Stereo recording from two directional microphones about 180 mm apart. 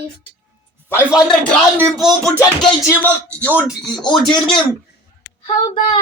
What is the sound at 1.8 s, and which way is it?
Speech, 15° right (ahead or behind).